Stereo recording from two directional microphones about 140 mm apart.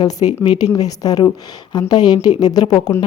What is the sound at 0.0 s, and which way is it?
A woman's voice, 30° left (ahead or behind).